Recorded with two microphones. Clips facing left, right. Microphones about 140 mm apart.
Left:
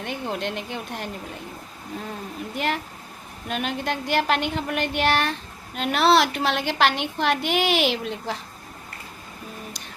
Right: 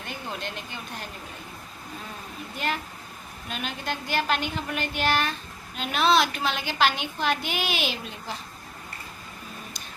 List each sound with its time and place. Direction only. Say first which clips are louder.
0.0 s a woman's voice: left 6 dB; 70° left (ahead or behind)
3.5 s a woman's voice: left 6 dB; 70° left (ahead or behind)